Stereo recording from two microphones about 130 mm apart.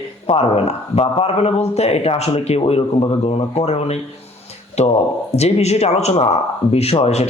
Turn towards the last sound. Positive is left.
turn(degrees=55)  # may be behind; listen again after turning